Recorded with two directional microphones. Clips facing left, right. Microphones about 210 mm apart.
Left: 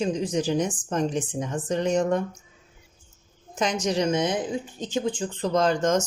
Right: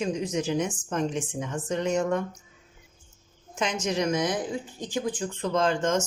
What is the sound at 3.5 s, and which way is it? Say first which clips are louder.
Speech: left 3 dB; 35° left (ahead or behind).